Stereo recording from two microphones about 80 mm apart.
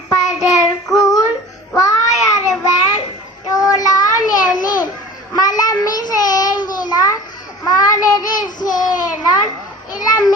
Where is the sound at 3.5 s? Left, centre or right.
Left.